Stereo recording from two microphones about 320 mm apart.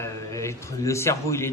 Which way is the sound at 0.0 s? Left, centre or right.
Centre.